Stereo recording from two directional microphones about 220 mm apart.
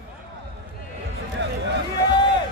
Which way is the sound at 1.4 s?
55° right (ahead or behind).